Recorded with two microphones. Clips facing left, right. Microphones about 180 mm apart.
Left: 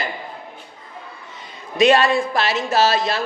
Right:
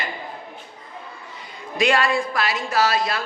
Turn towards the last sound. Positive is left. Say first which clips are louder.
# left 3 dB
turn(degrees=25)  # may be behind; listen again after turning